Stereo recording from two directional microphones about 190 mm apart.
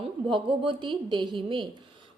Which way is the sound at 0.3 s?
25° right (ahead or behind).